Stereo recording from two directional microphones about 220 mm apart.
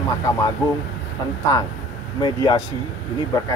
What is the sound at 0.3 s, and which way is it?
Speech, 15° left (ahead or behind).